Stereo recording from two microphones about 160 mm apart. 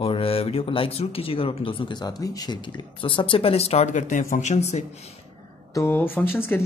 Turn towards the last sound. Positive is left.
turn(degrees=15)  # may be behind; listen again after turning